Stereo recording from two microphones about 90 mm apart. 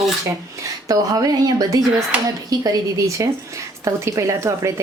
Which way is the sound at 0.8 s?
45° right (ahead or behind).